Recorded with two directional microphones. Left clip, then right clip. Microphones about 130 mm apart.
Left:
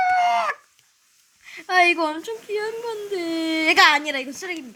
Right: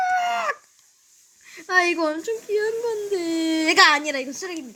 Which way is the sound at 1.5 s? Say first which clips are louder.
Left 3 dB; 20° left (ahead or behind).